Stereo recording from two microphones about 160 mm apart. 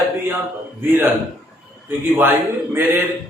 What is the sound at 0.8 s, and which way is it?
Speech, 15° right (ahead or behind).